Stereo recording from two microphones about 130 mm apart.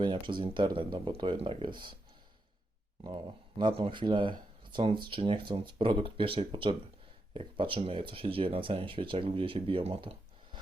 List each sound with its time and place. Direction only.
0.0 s speech: 40° right (ahead or behind)
3.0 s speech: 35° right (ahead or behind)